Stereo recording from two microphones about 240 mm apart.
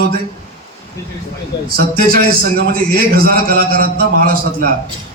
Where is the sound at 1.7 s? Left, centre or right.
Right.